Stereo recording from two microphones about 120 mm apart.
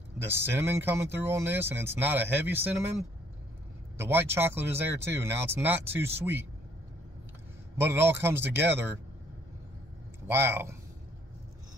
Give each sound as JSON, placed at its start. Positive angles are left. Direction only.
{"t": 0.2, "sound": "speech", "side_deg": -20}
{"t": 4.0, "sound": "speech", "side_deg": -20}
{"t": 7.7, "sound": "speech", "side_deg": -20}
{"t": 10.2, "sound": "speech", "side_deg": -20}